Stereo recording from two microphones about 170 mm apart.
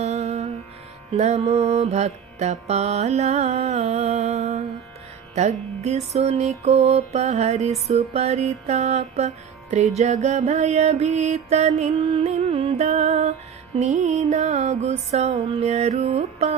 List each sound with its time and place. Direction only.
0.0 s music: 40° right (ahead or behind)